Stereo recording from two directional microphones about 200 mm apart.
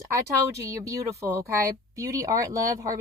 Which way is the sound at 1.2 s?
15° right (ahead or behind).